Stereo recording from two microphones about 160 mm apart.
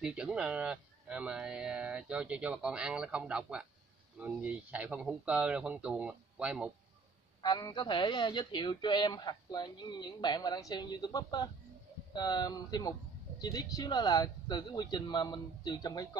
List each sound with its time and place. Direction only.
0.0 s speech: 5° right (ahead or behind)
7.4 s speech: 25° left (ahead or behind)